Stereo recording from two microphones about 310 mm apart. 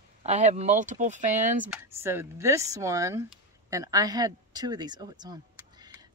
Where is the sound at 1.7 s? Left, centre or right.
Centre.